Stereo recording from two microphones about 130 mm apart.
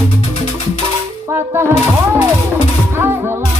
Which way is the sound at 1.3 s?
20° right (ahead or behind).